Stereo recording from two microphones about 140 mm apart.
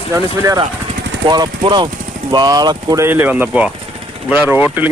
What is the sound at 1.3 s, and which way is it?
Speech, 30° right (ahead or behind).